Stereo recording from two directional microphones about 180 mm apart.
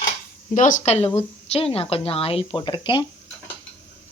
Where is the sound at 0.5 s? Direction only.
45° left (ahead or behind); by 3.1 s 25° left (ahead or behind).